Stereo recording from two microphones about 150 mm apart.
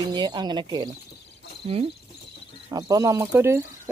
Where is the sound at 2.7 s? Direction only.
25° right (ahead or behind).